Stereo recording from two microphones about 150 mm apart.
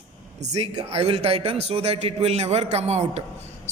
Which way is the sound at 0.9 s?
40° right (ahead or behind).